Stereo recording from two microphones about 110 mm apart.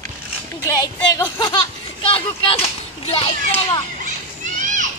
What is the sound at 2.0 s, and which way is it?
A child's voice, 55° left (ahead or behind).